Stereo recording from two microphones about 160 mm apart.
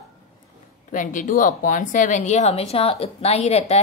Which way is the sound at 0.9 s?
55° left (ahead or behind).